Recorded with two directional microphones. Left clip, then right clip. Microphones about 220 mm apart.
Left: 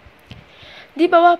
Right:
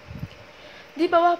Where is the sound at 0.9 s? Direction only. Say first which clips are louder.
Left 7 dB; 25° left (ahead or behind).